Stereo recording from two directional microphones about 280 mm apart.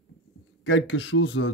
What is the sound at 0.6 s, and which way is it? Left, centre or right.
Speech, left.